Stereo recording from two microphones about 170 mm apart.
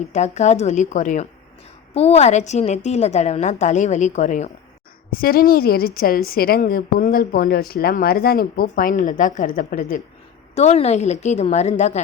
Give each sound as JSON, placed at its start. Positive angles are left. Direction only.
{"t": 0.1, "sound": "a woman's voice", "side_deg": 40}
{"t": 1.9, "sound": "a woman's voice", "side_deg": 35}
{"t": 5.1, "sound": "a woman's voice", "side_deg": 60}
{"t": 10.5, "sound": "a woman's voice", "side_deg": 40}